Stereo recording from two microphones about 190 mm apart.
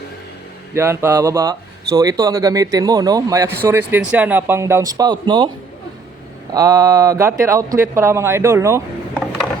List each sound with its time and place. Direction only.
0.7 s speech: 15° right (ahead or behind)
6.5 s speech: 20° right (ahead or behind)